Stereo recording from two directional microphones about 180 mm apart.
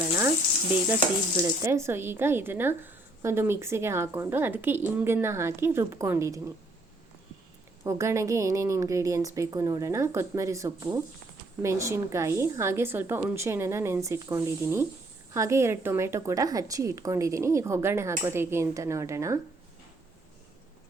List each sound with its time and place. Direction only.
0.2 s frying: 10° right (ahead or behind)
1.4 s speech: 15° right (ahead or behind)
7.9 s speech: 15° right (ahead or behind)